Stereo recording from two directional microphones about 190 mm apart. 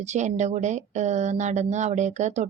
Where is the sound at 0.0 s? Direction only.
40° right (ahead or behind).